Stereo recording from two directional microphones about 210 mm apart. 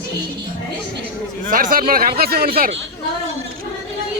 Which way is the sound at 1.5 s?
40° right (ahead or behind).